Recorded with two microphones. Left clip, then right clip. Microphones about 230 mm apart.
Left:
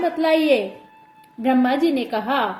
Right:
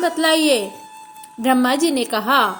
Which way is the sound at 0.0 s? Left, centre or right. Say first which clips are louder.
Right 2 dB; right.